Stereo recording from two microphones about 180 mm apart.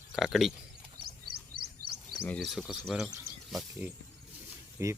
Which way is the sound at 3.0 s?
Centre (ahead or behind).